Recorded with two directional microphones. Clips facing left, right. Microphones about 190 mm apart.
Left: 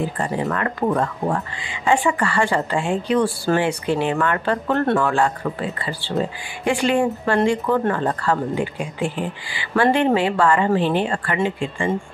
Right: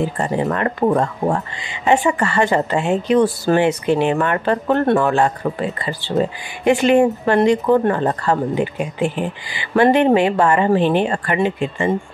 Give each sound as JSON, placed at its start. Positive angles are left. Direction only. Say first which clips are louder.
{"t": 0.0, "sound": "speech", "louder": "right 3 dB", "side_deg": -25}